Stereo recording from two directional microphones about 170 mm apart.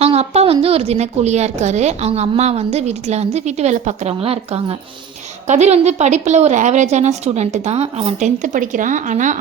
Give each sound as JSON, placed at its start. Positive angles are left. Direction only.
{"t": 0.0, "sound": "a woman's voice", "side_deg": -40}